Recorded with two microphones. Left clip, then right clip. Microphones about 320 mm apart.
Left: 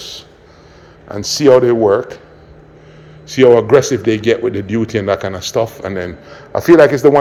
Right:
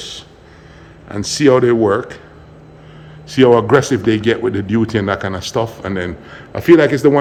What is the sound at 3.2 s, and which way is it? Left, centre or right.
Speech, centre.